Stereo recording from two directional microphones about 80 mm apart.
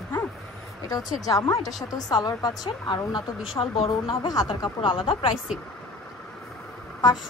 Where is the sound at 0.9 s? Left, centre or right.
Left.